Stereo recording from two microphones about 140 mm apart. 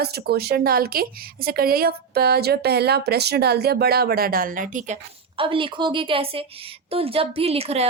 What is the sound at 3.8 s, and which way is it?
A woman's voice, 90° right.